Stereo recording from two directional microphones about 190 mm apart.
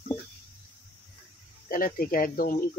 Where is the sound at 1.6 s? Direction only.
50° left (ahead or behind).